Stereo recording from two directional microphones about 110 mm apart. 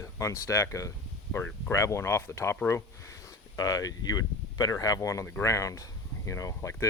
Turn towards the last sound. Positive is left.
turn(degrees=30)  # may be behind; listen again after turning